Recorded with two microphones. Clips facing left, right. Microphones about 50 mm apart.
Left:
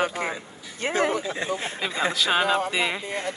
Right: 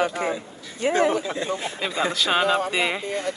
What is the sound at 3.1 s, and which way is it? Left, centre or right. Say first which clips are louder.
Speech: right 3 dB; left.